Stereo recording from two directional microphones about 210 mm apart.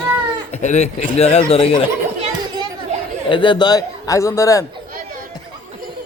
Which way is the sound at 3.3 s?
25° left (ahead or behind).